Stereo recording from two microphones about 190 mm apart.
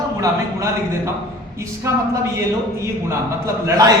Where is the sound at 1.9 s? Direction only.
15° right (ahead or behind).